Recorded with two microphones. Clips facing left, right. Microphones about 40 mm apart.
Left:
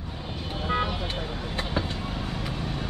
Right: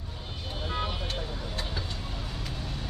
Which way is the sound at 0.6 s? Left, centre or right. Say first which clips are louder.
Left 6 dB; left.